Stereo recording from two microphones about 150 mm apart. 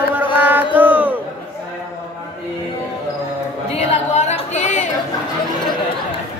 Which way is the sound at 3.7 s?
45° left (ahead or behind).